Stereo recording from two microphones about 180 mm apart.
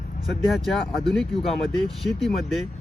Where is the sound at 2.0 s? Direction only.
Centre (ahead or behind).